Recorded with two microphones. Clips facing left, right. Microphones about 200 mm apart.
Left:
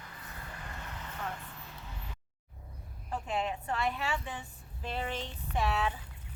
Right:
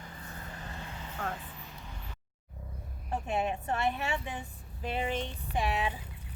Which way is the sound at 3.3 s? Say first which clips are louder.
Right 2 dB; 25° right (ahead or behind).